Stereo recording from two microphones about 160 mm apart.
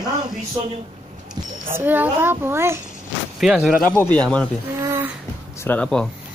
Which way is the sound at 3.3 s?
Centre (ahead or behind).